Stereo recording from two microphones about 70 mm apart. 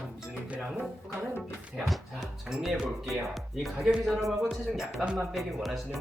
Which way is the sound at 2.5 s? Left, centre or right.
Centre.